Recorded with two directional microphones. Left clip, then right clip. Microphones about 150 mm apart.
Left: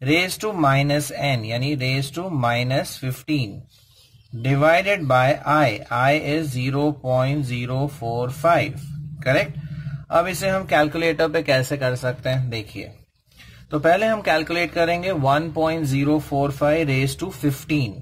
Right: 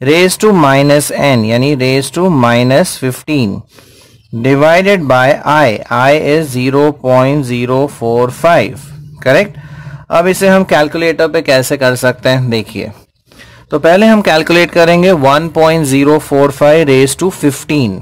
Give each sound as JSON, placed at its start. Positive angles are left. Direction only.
{"t": 0.0, "sound": "a man's voice", "side_deg": -50}